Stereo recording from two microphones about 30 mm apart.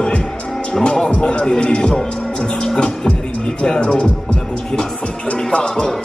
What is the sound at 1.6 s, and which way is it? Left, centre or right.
Speech, left.